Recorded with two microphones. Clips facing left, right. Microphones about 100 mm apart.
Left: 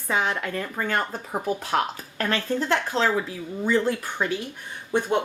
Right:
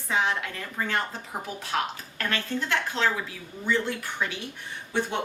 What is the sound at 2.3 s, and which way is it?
Speech, 35° left (ahead or behind).